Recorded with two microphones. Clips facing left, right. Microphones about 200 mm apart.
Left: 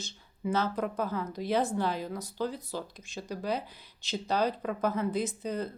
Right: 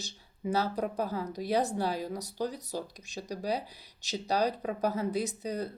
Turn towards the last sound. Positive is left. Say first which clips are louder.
# left 1 dB
turn(degrees=-40)  # may be behind; listen again after turning